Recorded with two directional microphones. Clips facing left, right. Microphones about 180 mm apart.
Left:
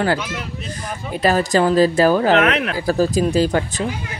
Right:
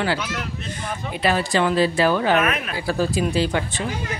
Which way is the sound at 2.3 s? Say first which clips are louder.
Left 5 dB; 70° left (ahead or behind).